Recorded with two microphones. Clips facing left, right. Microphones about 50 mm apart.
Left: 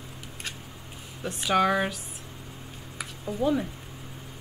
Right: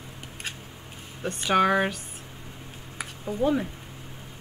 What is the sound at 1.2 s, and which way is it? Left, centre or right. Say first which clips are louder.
Speech: right 2 dB; centre.